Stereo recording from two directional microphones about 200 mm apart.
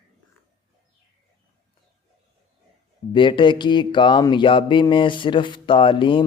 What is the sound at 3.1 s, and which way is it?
Speech, 25° left (ahead or behind).